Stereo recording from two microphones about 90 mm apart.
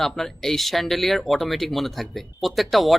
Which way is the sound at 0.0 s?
5° left (ahead or behind).